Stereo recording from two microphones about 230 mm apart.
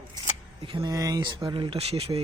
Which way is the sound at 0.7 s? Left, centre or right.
Centre.